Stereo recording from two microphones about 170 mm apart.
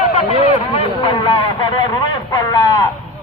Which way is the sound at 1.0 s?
30° left (ahead or behind).